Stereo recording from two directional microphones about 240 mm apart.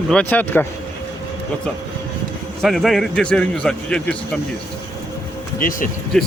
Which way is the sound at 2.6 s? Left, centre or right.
Centre.